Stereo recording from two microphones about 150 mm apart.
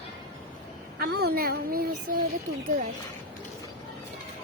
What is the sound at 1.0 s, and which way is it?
Speech, 90° right.